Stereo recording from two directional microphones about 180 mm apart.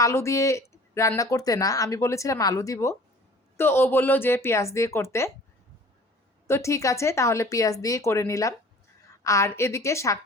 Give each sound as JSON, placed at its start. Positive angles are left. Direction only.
{"t": 0.0, "sound": "speech", "side_deg": 15}
{"t": 6.5, "sound": "speech", "side_deg": 15}